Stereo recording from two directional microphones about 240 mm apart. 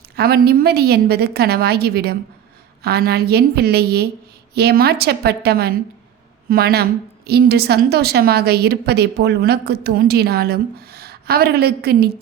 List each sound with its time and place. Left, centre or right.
0.2 s a woman's voice: right